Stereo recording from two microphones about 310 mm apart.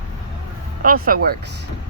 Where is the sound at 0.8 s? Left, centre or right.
Right.